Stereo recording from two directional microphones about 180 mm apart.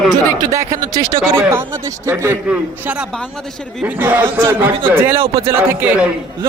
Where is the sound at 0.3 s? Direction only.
15° right (ahead or behind).